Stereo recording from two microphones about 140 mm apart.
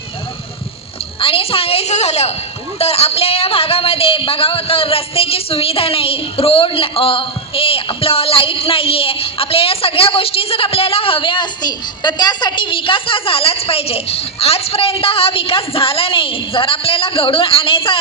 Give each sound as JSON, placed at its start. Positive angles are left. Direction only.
{"t": 1.2, "sound": "speech", "side_deg": 40}